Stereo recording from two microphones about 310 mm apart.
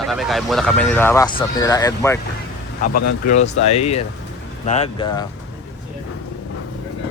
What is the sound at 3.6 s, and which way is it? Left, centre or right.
Speech, centre.